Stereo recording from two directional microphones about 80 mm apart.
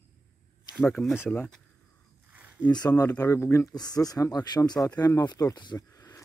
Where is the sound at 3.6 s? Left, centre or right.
Left.